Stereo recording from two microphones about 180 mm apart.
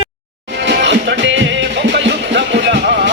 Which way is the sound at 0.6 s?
90° right.